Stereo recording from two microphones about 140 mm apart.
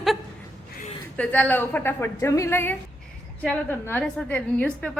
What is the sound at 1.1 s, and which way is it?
A woman's voice, 10° left (ahead or behind).